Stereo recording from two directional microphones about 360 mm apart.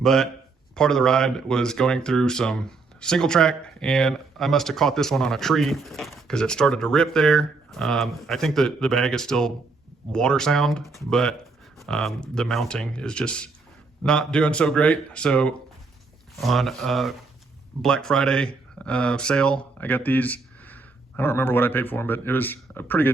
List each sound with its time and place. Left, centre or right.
0.0 s speech: centre